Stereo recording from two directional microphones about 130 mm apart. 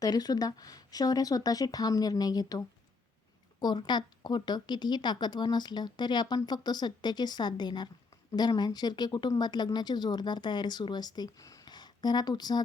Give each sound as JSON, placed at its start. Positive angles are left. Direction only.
{"t": 0.0, "sound": "speech", "side_deg": 30}